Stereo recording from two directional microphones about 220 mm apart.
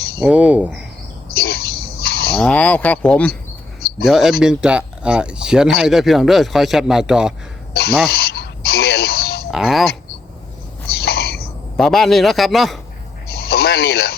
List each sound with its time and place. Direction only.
0.2 s speech: 5° right (ahead or behind)
1.4 s cricket: 45° left (ahead or behind)
2.4 s speech: 5° left (ahead or behind)
7.7 s speech: 45° left (ahead or behind)
8.1 s a sound: 45° left (ahead or behind)
9.5 s speech: centre (ahead or behind)
11.0 s a sound: 45° left (ahead or behind)
11.8 s speech: centre (ahead or behind)
13.2 s a sound: 45° left (ahead or behind)